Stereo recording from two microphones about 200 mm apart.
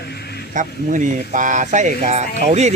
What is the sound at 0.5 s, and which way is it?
Speech, 40° right (ahead or behind).